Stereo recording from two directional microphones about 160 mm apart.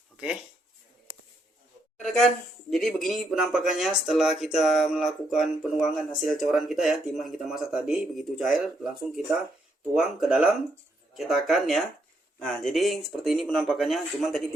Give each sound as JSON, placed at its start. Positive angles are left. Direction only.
{"t": 2.0, "sound": "speech", "side_deg": 0}